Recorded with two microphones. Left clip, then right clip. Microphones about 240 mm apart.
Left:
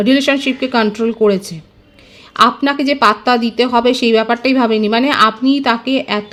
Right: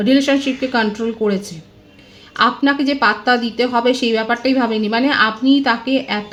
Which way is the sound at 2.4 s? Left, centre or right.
Left.